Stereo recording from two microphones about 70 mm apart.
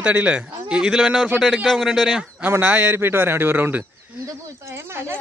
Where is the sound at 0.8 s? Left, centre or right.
Centre.